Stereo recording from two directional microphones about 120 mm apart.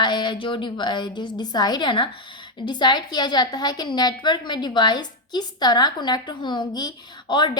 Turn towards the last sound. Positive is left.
turn(degrees=40)  # may be behind; listen again after turning